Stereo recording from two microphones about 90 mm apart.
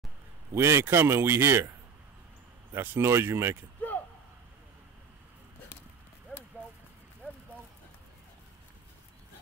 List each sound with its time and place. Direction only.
0.6 s speech: 30° right (ahead or behind)
2.7 s speech: 25° right (ahead or behind)